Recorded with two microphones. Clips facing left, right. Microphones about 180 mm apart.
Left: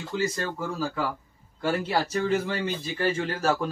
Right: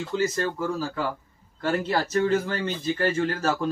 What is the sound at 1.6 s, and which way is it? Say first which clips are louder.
Speech: right 1 dB; 10° left (ahead or behind).